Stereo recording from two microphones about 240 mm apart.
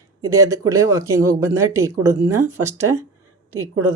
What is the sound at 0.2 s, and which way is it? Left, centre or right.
Speech, centre.